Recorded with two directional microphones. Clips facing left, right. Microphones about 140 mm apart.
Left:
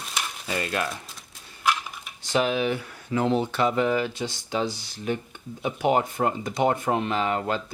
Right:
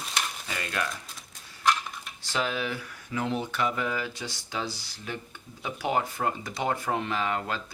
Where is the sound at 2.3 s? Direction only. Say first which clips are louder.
Left 7 dB; 20° left (ahead or behind).